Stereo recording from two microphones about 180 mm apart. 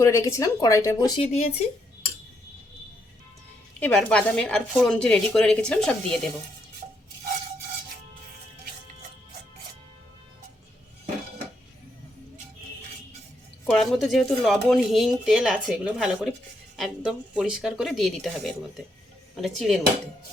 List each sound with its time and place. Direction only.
0.0 s a woman's voice: 15° left (ahead or behind)
1.2 s speech: 35° left (ahead or behind)
3.8 s speech: 5° left (ahead or behind)
13.7 s speech: centre (ahead or behind)